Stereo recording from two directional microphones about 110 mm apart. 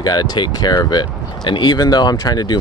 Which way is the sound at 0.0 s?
40° left (ahead or behind).